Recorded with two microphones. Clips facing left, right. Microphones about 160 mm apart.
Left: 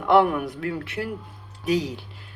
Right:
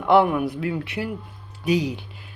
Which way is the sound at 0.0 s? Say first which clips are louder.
Right 1 dB; centre (ahead or behind).